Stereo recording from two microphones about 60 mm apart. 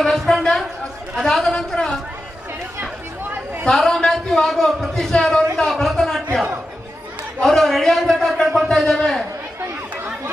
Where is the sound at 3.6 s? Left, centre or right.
Centre.